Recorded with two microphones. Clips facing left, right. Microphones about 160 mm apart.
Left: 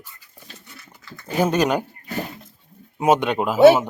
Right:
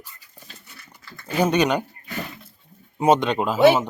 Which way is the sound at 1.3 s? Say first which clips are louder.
Even; 5° left (ahead or behind).